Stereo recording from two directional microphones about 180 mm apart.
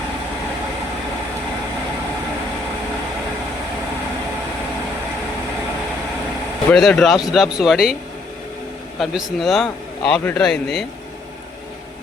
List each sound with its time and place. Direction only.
6.7 s a man's voice: centre (ahead or behind)
9.0 s a man's voice: centre (ahead or behind)